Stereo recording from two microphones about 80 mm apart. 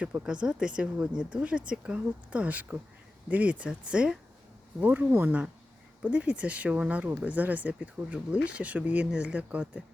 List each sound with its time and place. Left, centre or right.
0.1 s speech: right